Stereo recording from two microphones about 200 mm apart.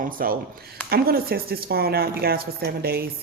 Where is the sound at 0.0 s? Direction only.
45° right (ahead or behind).